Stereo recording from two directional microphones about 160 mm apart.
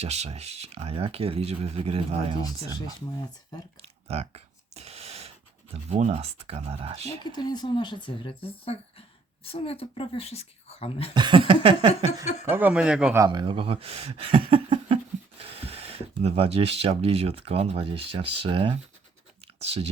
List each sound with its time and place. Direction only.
0.0 s speech: 40° right (ahead or behind)
2.4 s speech: 25° left (ahead or behind)
4.1 s a sound: 40° right (ahead or behind)
5.7 s speech: 45° right (ahead or behind)
7.3 s speech: 25° left (ahead or behind)
11.1 s speech: 30° right (ahead or behind)
12.5 s speech: 10° right (ahead or behind)
13.1 s speech: 25° right (ahead or behind)